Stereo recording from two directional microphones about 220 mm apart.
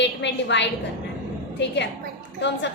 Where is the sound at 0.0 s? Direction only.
55° left (ahead or behind).